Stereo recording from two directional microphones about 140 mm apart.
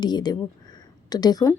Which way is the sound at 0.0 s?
30° left (ahead or behind).